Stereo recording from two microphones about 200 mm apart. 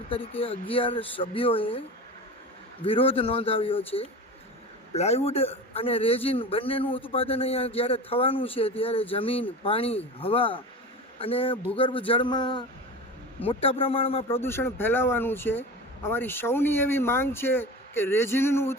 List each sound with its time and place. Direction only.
0.1 s a man's voice: 25° left (ahead or behind)
2.8 s a man's voice: 25° left (ahead or behind)
14.3 s speech: 10° left (ahead or behind)